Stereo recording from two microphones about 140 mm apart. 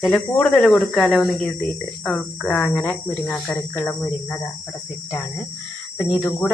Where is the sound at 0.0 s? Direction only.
5° left (ahead or behind).